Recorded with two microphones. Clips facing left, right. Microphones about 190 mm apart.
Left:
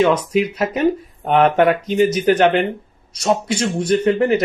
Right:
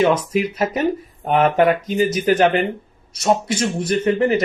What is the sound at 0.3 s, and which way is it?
Speech, centre (ahead or behind).